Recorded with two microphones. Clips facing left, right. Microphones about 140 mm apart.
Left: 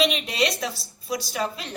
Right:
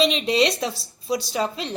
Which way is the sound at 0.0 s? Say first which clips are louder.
Right 4 dB; 30° right (ahead or behind).